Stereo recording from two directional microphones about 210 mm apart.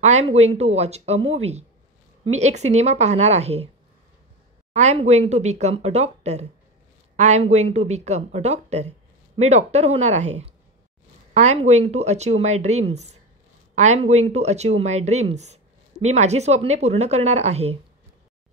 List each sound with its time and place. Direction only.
0.0 s speech: 30° right (ahead or behind)
4.7 s speech: 30° right (ahead or behind)